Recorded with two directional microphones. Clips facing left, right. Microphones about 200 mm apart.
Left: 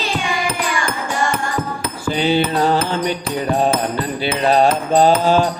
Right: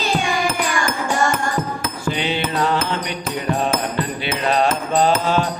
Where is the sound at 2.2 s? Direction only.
35° left (ahead or behind).